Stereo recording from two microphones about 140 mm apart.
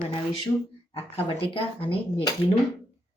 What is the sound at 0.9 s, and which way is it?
Speech, 40° left (ahead or behind).